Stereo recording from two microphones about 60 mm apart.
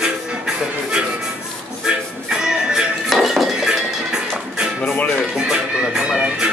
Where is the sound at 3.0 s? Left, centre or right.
Centre.